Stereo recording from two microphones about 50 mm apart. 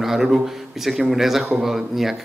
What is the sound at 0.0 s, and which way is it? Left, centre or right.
A man's voice, centre.